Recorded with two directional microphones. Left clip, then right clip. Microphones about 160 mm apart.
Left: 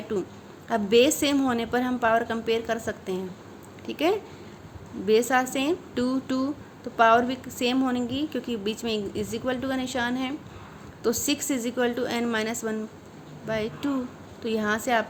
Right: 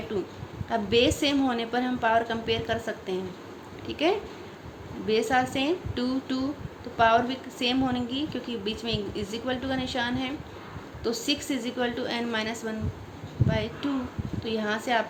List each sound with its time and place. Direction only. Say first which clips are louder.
0.1 s a woman's voice: left 4 dB; 45° left (ahead or behind)